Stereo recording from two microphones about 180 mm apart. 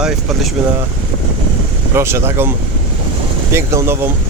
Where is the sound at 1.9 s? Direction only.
15° right (ahead or behind).